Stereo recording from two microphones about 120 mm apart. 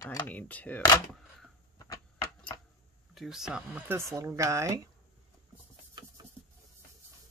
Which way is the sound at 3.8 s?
25° right (ahead or behind).